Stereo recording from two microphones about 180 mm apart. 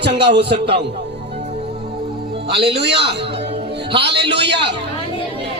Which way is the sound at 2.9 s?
30° right (ahead or behind).